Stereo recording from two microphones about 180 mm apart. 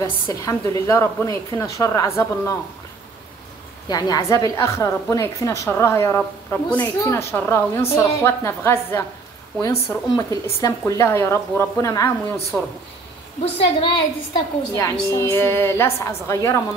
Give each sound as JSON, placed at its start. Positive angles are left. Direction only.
{"t": 0.0, "sound": "a woman's voice", "side_deg": 20}
{"t": 3.9, "sound": "a woman's voice", "side_deg": 20}
{"t": 13.7, "sound": "a woman's voice", "side_deg": 25}
{"t": 14.7, "sound": "a woman's voice", "side_deg": 15}